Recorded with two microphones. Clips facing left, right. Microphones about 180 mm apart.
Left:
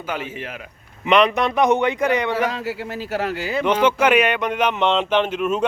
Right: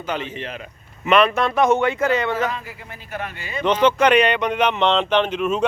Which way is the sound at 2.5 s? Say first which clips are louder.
Left 6 dB; 80° left.